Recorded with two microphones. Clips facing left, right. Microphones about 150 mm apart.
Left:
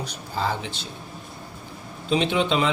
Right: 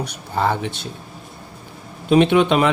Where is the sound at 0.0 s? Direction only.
65° right (ahead or behind).